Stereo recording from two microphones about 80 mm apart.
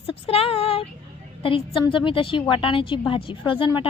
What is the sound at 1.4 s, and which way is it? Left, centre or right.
A woman's voice, left.